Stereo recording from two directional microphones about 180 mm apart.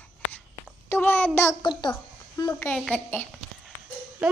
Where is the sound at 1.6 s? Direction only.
25° left (ahead or behind).